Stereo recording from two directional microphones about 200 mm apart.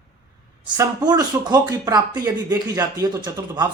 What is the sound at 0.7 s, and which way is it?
Speech, 20° right (ahead or behind).